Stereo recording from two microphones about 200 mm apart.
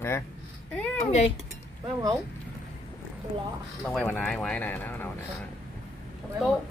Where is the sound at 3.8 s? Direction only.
5° left (ahead or behind).